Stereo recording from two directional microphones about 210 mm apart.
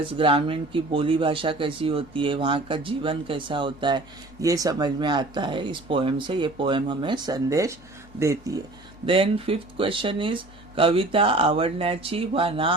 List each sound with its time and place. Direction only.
0.2 s speech: 25° right (ahead or behind)
9.0 s speech: 25° right (ahead or behind)